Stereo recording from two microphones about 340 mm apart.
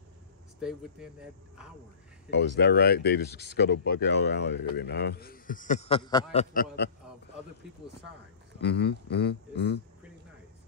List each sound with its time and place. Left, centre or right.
0.6 s speech: centre
2.3 s speech: left
6.3 s speech: left
8.5 s speech: left